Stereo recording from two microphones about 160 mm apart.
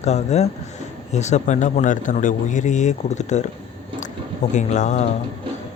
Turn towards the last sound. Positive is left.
turn(degrees=45)  # may be behind; listen again after turning